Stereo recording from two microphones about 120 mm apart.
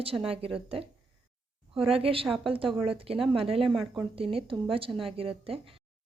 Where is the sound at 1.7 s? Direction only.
50° right (ahead or behind).